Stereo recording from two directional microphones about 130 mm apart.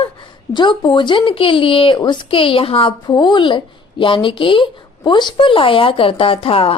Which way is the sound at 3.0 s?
35° left (ahead or behind).